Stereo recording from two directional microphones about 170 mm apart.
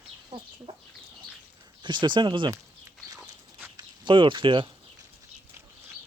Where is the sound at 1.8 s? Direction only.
25° right (ahead or behind).